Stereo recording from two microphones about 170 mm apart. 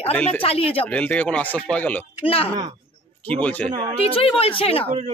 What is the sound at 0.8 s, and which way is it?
Speech, 10° left (ahead or behind).